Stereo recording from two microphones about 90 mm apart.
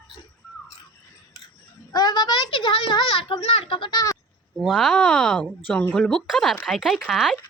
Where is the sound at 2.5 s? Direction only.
65° left (ahead or behind); by 3.9 s 90° left.